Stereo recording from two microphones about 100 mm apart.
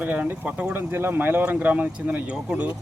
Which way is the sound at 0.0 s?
15° right (ahead or behind).